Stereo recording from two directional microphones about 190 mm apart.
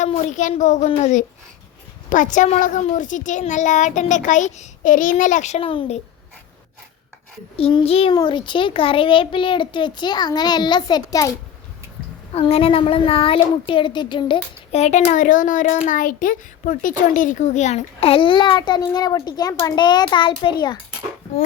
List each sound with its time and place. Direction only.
0.0 s a child's voice: 40° left (ahead or behind)
7.5 s speech: 25° left (ahead or behind)
12.3 s speech: 30° left (ahead or behind)